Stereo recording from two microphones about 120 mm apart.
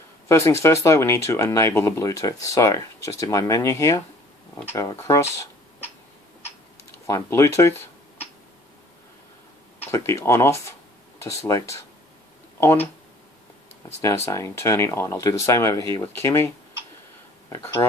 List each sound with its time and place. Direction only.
0.3 s speech: 25° left (ahead or behind)
7.1 s speech: 25° left (ahead or behind)
9.8 s speech: 25° left (ahead or behind)